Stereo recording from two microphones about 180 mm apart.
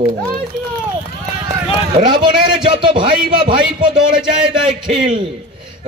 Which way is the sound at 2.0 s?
25° right (ahead or behind).